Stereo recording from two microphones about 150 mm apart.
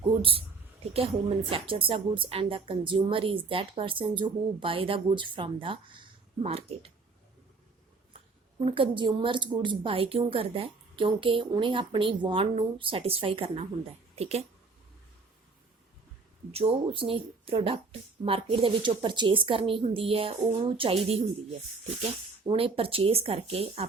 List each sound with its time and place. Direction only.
0.1 s a woman's voice: 35° right (ahead or behind)
8.6 s a woman's voice: 35° right (ahead or behind)
16.5 s a woman's voice: 40° right (ahead or behind)
22.4 s a woman's voice: 40° right (ahead or behind)